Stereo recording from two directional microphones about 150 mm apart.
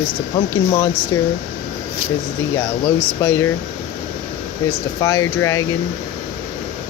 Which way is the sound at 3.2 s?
20° left (ahead or behind).